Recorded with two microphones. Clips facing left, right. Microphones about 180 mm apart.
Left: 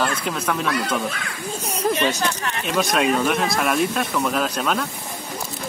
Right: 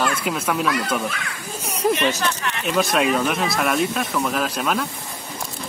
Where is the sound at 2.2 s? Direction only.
35° left (ahead or behind).